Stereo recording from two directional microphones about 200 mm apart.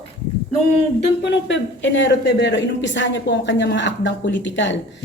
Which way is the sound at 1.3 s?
65° left (ahead or behind).